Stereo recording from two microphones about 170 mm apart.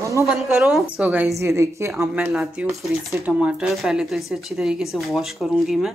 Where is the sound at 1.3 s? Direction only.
15° right (ahead or behind).